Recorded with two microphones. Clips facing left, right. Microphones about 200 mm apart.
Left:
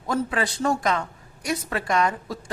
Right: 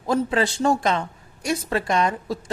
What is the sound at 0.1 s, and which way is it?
Speech, 25° right (ahead or behind).